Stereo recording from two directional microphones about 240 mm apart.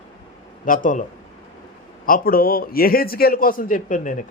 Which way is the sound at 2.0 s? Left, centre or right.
Left.